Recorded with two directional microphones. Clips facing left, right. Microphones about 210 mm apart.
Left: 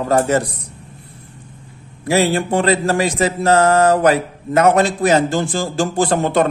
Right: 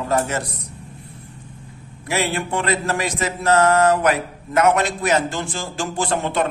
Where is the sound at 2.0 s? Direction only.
35° left (ahead or behind).